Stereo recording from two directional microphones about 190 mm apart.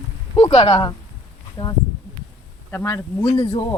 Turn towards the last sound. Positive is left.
turn(degrees=20)  # may be behind; listen again after turning